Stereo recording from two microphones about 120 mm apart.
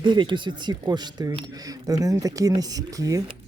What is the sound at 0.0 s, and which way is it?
Speech, 40° right (ahead or behind).